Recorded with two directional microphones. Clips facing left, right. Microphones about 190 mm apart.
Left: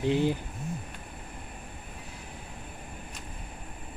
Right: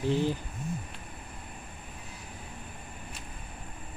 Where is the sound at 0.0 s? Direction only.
15° left (ahead or behind).